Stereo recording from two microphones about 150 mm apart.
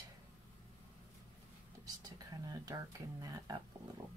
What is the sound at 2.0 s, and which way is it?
Speech, 25° right (ahead or behind).